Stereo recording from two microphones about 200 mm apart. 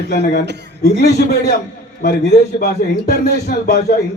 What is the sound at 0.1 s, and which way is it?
A man's voice, 45° left (ahead or behind).